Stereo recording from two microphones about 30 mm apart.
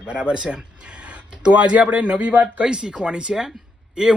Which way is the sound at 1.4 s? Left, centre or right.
Right.